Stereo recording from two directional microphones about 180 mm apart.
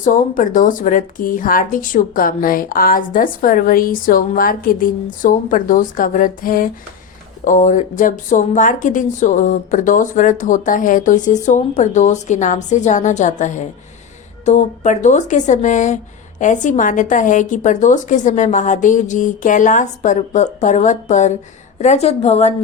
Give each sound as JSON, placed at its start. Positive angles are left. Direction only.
{"t": 0.0, "sound": "a woman's voice", "side_deg": 50}